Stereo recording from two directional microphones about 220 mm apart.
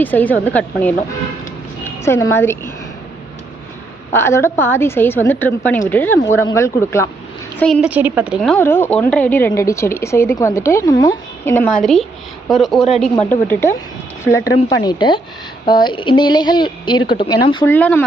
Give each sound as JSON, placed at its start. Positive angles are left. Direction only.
{"t": 0.0, "sound": "a woman's voice", "side_deg": 10}
{"t": 4.1, "sound": "a woman's voice", "side_deg": 10}
{"t": 17.7, "sound": "a woman's voice", "side_deg": 5}